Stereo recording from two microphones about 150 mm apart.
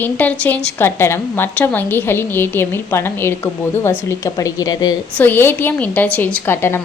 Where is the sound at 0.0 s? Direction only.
10° left (ahead or behind).